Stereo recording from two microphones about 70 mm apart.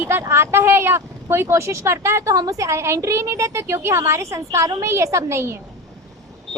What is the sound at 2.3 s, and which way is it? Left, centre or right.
A woman's voice, right.